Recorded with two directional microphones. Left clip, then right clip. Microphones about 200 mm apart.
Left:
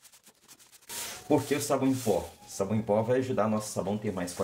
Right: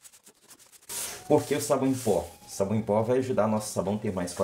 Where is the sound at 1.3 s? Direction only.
35° right (ahead or behind).